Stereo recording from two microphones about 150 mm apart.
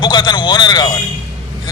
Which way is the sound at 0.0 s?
30° left (ahead or behind).